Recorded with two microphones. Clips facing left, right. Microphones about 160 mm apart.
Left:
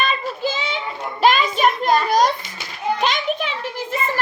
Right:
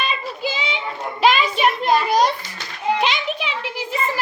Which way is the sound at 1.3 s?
45° left (ahead or behind).